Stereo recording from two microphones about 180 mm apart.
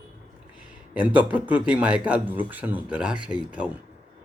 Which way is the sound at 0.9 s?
10° right (ahead or behind).